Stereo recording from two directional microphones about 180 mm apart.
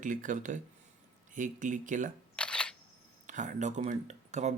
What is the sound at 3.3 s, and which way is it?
Speech, 45° right (ahead or behind).